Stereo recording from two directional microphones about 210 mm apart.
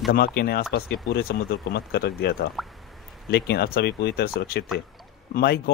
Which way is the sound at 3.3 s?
50° left (ahead or behind).